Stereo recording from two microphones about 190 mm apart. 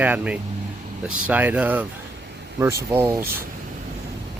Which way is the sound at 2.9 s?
10° right (ahead or behind).